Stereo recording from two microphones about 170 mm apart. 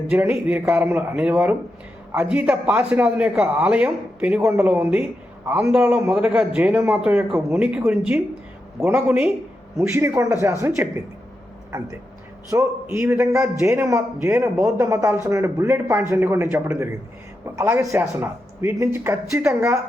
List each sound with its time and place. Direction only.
0.1 s a man's voice: 10° right (ahead or behind)
12.5 s a man's voice: 15° right (ahead or behind)